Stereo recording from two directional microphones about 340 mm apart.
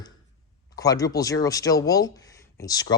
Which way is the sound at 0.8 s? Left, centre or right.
Centre.